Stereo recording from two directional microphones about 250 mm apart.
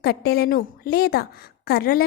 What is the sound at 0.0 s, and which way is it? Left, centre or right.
A woman's voice, left.